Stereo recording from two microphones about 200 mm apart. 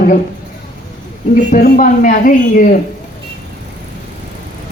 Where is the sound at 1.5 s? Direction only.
45° left (ahead or behind).